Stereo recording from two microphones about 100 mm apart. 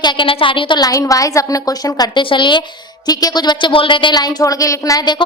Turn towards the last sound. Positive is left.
turn(degrees=45)  # may be behind; listen again after turning